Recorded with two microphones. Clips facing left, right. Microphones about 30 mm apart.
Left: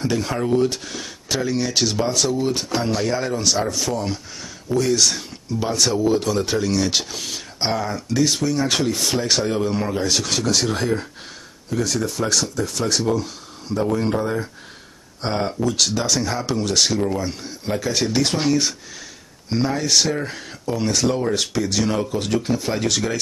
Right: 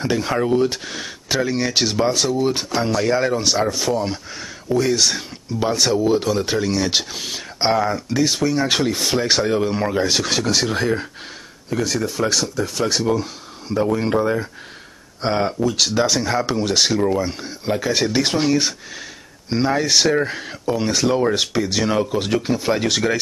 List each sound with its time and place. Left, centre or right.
0.0 s speech: centre